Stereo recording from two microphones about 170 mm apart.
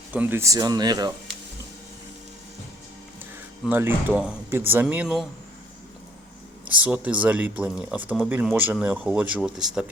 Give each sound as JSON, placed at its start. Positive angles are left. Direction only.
{"t": 0.1, "sound": "speech", "side_deg": -10}
{"t": 3.7, "sound": "speech", "side_deg": -10}
{"t": 6.7, "sound": "speech", "side_deg": -10}